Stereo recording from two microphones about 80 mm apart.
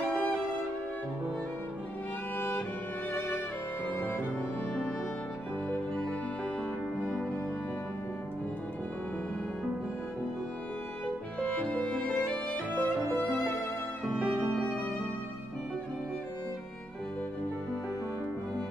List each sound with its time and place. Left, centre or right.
2.3 s music: left
11.3 s violin: centre
14.1 s music: centre